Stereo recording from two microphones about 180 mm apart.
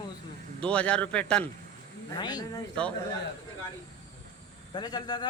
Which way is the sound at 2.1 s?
20° left (ahead or behind).